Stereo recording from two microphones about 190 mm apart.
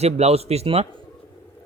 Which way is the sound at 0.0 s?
35° right (ahead or behind).